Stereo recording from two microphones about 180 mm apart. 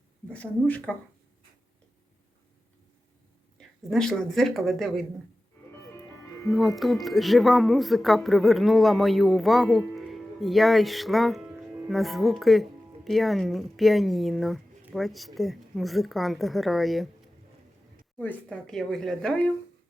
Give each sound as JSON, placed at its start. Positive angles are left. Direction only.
{"t": 0.3, "sound": "speech", "side_deg": 5}
{"t": 3.6, "sound": "speech", "side_deg": 5}
{"t": 5.9, "sound": "music", "side_deg": 15}
{"t": 6.5, "sound": "speech", "side_deg": 0}
{"t": 18.2, "sound": "speech", "side_deg": 10}